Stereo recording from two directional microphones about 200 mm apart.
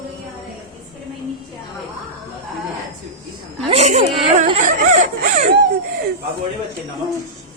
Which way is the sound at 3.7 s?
35° right (ahead or behind).